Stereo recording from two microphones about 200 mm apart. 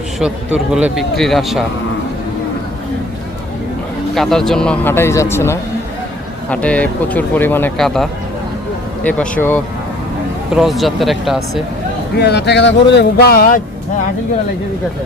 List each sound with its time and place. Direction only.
0.7 s speech: 5° right (ahead or behind)
4.1 s speech: centre (ahead or behind)
12.1 s speech: 55° left (ahead or behind)